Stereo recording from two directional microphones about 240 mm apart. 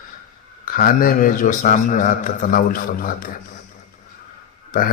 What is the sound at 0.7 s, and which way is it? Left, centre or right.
A man's voice, left.